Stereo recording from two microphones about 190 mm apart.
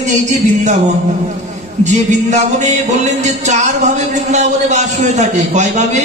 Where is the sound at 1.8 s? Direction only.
40° right (ahead or behind).